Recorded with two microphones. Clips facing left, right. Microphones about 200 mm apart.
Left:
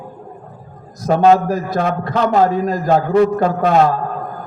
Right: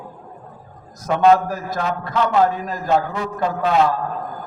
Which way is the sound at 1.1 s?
40° left (ahead or behind).